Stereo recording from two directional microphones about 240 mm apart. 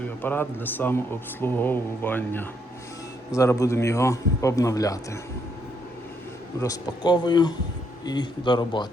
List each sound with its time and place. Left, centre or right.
0.0 s speech: centre
6.6 s speech: centre